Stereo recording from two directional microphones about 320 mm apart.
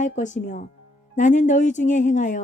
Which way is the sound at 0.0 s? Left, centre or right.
Left.